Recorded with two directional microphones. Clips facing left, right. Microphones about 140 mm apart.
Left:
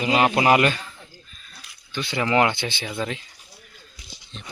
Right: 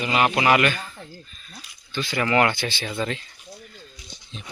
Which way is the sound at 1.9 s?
15° left (ahead or behind).